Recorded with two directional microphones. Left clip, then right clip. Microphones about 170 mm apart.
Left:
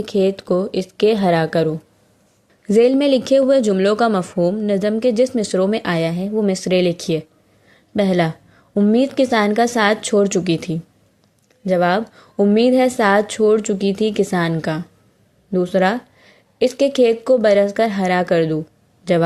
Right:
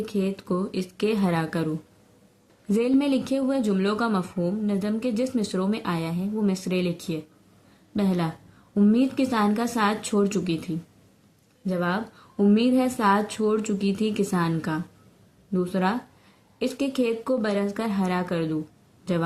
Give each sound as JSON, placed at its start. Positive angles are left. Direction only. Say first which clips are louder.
{"t": 0.0, "sound": "a woman's voice", "louder": "left 11 dB", "side_deg": 30}